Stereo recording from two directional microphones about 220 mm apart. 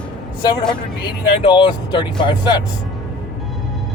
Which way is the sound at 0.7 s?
20° left (ahead or behind).